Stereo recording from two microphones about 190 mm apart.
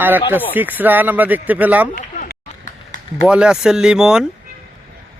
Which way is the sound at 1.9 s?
55° left (ahead or behind).